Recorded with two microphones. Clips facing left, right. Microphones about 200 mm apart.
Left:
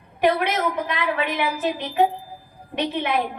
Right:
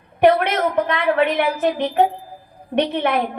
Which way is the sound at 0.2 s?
55° right (ahead or behind).